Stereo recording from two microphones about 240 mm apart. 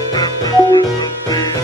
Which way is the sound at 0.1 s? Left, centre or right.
Centre.